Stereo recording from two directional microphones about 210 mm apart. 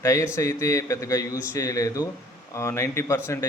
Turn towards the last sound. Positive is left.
turn(degrees=10)  # may be behind; listen again after turning